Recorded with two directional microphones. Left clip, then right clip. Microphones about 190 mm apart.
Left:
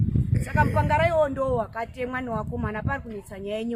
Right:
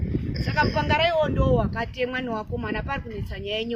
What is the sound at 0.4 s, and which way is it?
Speech, 5° right (ahead or behind).